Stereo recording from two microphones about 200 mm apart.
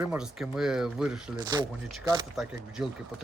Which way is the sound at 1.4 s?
20° right (ahead or behind).